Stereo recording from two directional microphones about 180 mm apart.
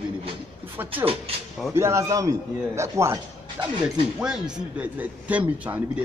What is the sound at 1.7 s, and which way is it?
A man's voice, 15° right (ahead or behind).